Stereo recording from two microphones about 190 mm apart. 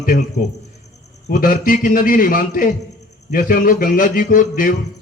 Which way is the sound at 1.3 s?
45° left (ahead or behind).